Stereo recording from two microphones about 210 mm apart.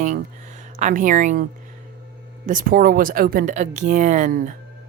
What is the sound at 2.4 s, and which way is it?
Speech, 40° right (ahead or behind).